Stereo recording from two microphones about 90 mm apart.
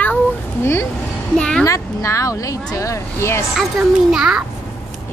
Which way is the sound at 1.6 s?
35° left (ahead or behind).